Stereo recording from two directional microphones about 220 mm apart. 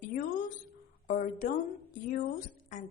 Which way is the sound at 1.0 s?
35° left (ahead or behind).